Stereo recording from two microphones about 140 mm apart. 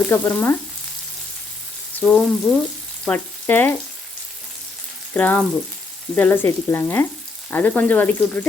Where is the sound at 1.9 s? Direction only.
5° left (ahead or behind).